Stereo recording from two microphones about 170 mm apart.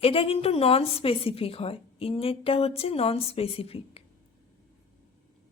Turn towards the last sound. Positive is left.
turn(degrees=35)  # may be behind; listen again after turning